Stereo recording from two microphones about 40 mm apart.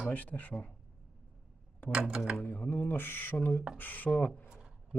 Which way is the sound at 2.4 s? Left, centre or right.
Left.